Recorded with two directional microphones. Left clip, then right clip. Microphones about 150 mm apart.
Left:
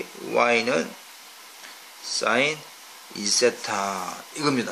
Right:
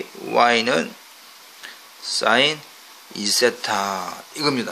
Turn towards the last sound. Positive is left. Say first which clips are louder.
# right 2 dB
turn(degrees=-30)  # may be behind; listen again after turning